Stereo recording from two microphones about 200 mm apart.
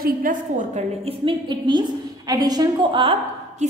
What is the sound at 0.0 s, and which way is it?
A woman's voice, 45° right (ahead or behind).